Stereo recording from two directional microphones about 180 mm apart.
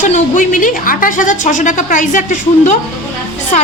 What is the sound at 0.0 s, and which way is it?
A woman's voice, 45° left (ahead or behind).